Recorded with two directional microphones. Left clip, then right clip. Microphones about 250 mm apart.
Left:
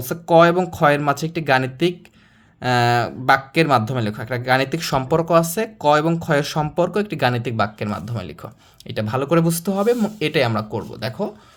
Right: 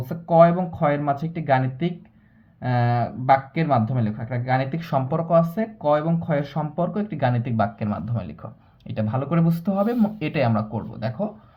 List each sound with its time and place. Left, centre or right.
0.0 s speech: left